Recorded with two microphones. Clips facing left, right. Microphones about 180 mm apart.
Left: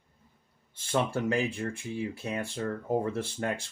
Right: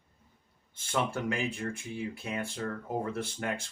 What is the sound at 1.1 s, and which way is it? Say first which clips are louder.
Speech: left 4 dB; 35° left (ahead or behind).